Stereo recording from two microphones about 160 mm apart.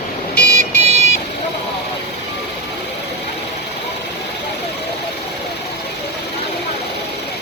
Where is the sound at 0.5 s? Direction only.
40° right (ahead or behind).